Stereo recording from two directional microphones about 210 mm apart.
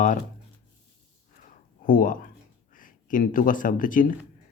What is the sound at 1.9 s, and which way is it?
Speech, 40° left (ahead or behind).